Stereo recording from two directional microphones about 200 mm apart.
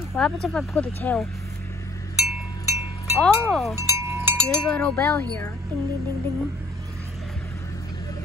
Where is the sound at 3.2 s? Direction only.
Centre (ahead or behind).